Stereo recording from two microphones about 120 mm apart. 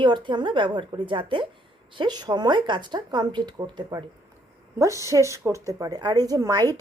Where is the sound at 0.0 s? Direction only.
40° right (ahead or behind).